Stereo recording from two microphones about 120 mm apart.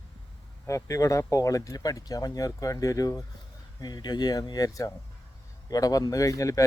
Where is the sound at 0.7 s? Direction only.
25° left (ahead or behind).